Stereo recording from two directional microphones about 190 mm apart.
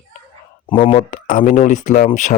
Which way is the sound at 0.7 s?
25° left (ahead or behind).